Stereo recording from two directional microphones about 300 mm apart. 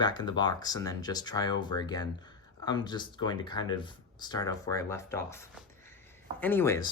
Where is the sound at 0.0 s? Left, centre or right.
Centre.